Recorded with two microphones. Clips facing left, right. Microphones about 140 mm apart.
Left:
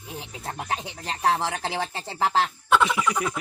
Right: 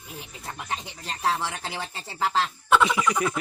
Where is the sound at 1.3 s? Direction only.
40° left (ahead or behind).